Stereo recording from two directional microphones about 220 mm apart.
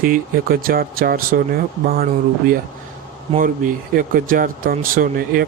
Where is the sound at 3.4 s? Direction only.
40° right (ahead or behind).